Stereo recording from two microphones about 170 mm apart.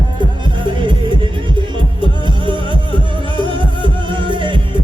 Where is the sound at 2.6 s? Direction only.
30° left (ahead or behind).